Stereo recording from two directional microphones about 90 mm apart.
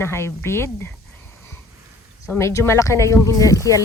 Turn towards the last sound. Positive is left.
turn(degrees=35)  # may be behind; listen again after turning